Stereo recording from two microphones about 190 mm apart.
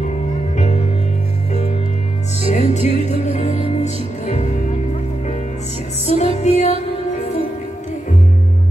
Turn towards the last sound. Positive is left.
turn(degrees=35)  # may be behind; listen again after turning